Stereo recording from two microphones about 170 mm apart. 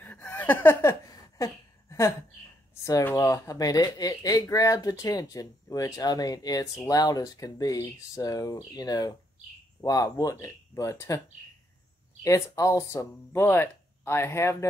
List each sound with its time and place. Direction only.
0.0 s laughter: 10° left (ahead or behind)
1.4 s a sound: 15° left (ahead or behind)
2.8 s speech: 15° left (ahead or behind)
12.2 s speech: 15° left (ahead or behind)